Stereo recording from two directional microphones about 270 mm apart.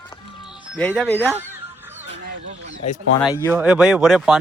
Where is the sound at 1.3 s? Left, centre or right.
Centre.